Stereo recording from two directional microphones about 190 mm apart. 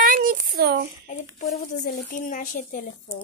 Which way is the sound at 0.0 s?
45° right (ahead or behind).